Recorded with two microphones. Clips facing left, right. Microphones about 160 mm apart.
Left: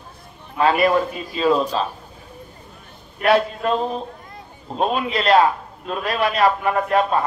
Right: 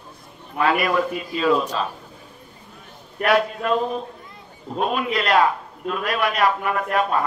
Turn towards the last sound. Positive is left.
turn(degrees=30)  # may be behind; listen again after turning